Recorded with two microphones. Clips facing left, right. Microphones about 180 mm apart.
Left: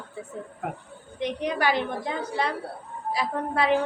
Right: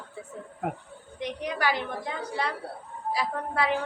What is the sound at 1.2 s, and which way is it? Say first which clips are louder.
A woman's voice: left 3 dB; 25° left (ahead or behind).